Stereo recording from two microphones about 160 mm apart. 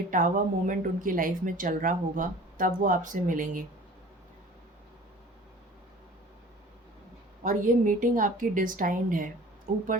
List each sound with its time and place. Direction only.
0.1 s speech: 55° right (ahead or behind)
7.4 s speech: 55° right (ahead or behind)